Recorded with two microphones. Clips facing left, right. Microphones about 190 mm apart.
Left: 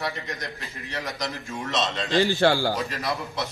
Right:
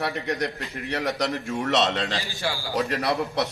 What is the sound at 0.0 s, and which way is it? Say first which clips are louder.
A man's voice: right 5 dB; 65° right (ahead or behind).